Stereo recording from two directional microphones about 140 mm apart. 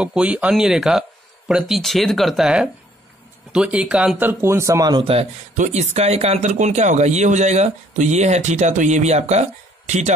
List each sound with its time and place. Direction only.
0.0 s speech: 5° right (ahead or behind); by 5.0 s 25° right (ahead or behind)
5.6 s speech: 50° right (ahead or behind)